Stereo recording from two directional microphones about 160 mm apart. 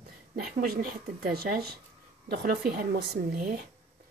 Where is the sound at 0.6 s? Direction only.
70° right (ahead or behind); by 3.2 s 90° right.